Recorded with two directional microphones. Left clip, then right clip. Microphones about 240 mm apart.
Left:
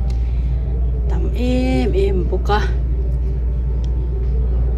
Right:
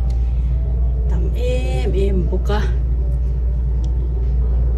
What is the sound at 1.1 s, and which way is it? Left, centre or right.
Speech, left.